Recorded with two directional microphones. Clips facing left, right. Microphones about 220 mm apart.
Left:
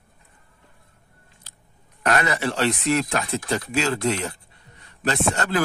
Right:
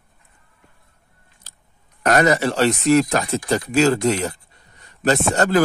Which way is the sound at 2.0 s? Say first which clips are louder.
Right 6 dB; 40° right (ahead or behind).